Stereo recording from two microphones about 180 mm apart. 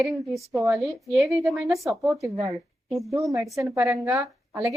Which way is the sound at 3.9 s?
Centre (ahead or behind).